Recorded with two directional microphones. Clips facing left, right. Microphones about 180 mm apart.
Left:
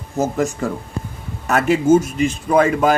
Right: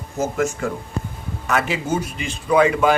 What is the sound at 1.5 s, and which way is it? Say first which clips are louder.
Speech: left 8 dB; 45° left (ahead or behind).